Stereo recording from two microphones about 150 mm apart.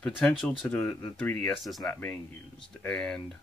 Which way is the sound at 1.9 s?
10° left (ahead or behind).